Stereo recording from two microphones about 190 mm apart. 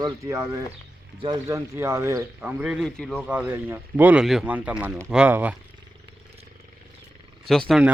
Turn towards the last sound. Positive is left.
turn(degrees=0)  # may be behind; listen again after turning